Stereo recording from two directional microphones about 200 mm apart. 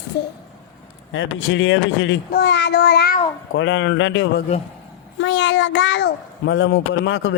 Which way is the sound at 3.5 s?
65° left (ahead or behind).